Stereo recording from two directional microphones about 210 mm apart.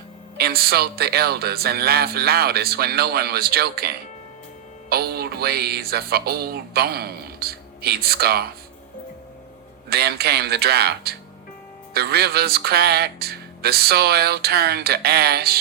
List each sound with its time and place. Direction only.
0.3 s speech: 50° right (ahead or behind)
9.9 s speech: 50° right (ahead or behind)